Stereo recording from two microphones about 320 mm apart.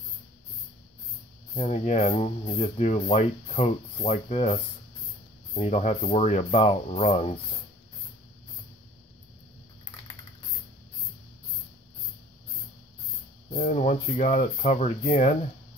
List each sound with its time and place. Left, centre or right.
1.5 s speech: left
13.5 s speech: left